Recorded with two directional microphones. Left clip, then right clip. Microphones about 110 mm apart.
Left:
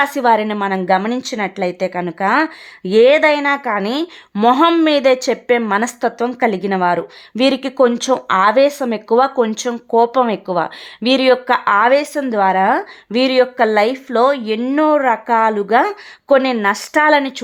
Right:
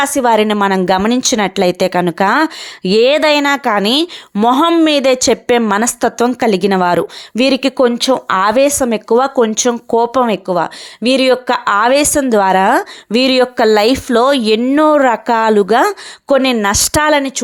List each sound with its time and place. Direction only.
0.0 s speech: 40° right (ahead or behind)
0.4 s speech: 60° right (ahead or behind)
1.2 s a woman's voice: 80° right; by 7.0 s 60° right (ahead or behind)
7.3 s speech: 45° right (ahead or behind)
8.3 s speech: 60° right (ahead or behind); by 11.6 s 35° right (ahead or behind)
11.6 s speech: 60° right (ahead or behind); by 14.6 s 75° right (ahead or behind)
14.8 s speech: 60° right (ahead or behind)
17.1 s a woman's voice: 30° right (ahead or behind)